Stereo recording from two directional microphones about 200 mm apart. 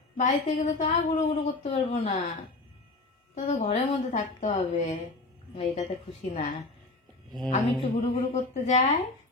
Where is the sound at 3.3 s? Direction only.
30° left (ahead or behind).